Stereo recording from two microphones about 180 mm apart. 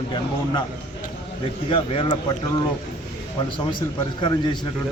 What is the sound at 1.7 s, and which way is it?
Speech, 25° left (ahead or behind).